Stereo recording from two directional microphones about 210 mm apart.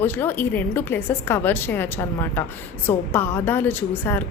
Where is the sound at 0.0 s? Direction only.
10° left (ahead or behind).